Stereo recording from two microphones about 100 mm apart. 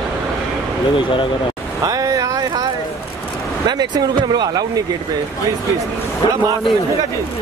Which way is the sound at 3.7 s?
45° right (ahead or behind).